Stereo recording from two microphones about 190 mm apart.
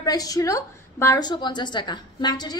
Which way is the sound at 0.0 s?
20° left (ahead or behind).